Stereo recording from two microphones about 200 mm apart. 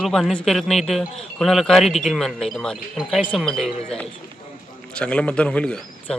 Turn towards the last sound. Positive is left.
turn(degrees=5)  # may be behind; listen again after turning